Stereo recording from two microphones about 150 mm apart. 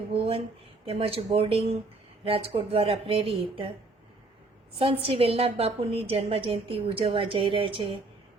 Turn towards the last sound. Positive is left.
turn(degrees=-35)  # may be behind; listen again after turning